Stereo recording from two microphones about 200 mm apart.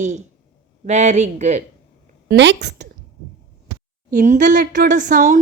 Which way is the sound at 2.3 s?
60° right (ahead or behind).